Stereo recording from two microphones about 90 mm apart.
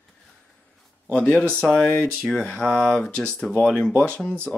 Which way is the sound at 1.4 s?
10° left (ahead or behind).